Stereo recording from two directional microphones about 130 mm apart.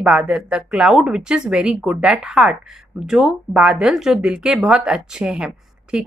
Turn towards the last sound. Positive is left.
turn(degrees=-5)  # may be behind; listen again after turning